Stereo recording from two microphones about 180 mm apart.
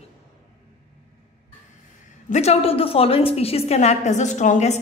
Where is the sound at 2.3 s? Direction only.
35° left (ahead or behind).